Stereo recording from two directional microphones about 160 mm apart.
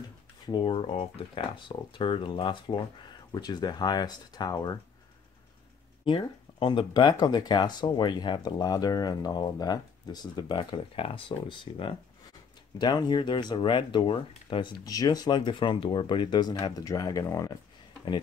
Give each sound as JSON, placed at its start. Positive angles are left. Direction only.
{"t": 0.5, "sound": "speech", "side_deg": 30}
{"t": 6.0, "sound": "speech", "side_deg": 30}